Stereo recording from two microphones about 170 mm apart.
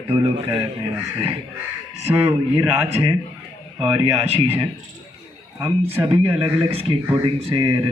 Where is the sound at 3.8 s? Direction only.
35° right (ahead or behind).